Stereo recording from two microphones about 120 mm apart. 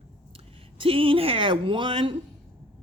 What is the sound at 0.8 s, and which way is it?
A woman's voice, 50° right (ahead or behind).